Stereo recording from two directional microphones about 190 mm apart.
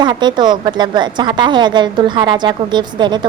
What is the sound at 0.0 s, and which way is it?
A woman's voice, 25° right (ahead or behind).